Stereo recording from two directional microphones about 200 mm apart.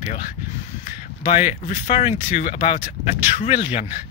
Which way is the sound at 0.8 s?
35° left (ahead or behind).